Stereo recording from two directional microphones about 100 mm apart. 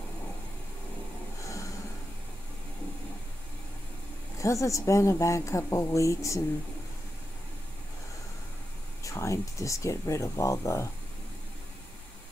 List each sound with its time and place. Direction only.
4.4 s speech: 30° left (ahead or behind)
9.0 s speech: 30° left (ahead or behind)